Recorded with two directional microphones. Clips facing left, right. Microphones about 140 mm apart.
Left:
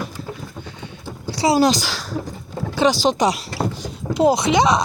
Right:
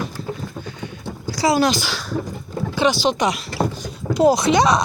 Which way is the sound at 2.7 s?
35° left (ahead or behind).